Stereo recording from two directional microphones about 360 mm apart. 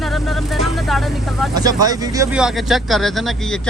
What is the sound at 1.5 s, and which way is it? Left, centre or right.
Speech, centre.